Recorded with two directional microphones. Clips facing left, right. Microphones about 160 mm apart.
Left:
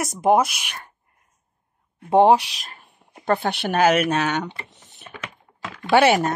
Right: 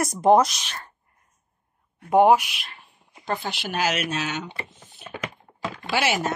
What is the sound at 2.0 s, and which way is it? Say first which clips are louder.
Speech: left 2 dB; 30° left (ahead or behind).